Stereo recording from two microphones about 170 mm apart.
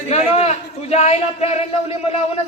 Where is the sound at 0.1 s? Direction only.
40° left (ahead or behind).